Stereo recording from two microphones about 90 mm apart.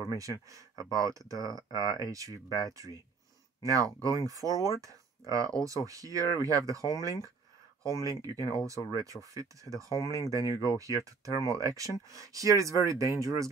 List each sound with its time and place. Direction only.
0.1 s speech: 40° right (ahead or behind)